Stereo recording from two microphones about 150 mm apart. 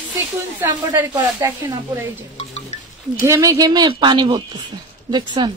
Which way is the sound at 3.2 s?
20° right (ahead or behind).